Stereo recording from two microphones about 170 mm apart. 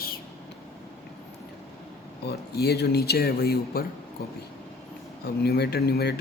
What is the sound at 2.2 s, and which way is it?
Speech, 70° left (ahead or behind).